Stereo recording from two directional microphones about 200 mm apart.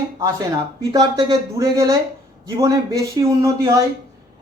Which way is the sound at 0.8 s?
20° right (ahead or behind).